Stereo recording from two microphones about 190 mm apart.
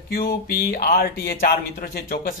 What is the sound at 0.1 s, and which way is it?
Speech, 50° left (ahead or behind).